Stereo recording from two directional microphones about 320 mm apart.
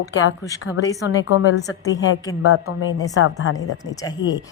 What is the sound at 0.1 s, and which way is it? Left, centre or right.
A woman's voice, left.